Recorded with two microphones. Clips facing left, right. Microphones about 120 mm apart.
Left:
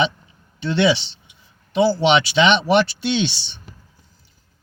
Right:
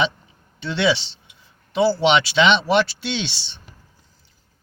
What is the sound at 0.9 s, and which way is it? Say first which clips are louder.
Speech: left 1 dB; 30° right (ahead or behind).